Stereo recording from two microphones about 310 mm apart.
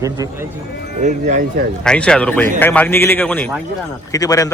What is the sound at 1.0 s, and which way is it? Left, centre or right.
Speech, right.